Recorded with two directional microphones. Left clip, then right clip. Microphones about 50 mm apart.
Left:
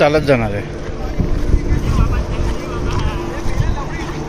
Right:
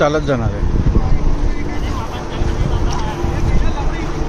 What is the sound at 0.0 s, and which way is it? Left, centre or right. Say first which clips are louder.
Speech: left 3 dB; left.